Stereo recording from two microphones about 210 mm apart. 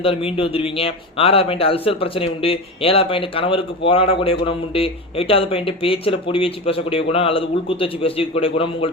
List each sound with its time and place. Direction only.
0.0 s a man's voice: 25° left (ahead or behind)